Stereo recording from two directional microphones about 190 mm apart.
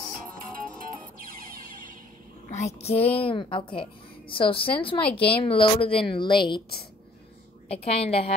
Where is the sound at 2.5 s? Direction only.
35° left (ahead or behind).